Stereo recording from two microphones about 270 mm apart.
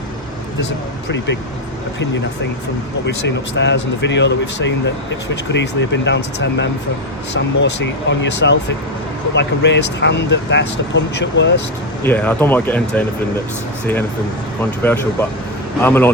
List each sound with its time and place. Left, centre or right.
3.2 s speech: left
12.0 s speech: centre
14.8 s speech: centre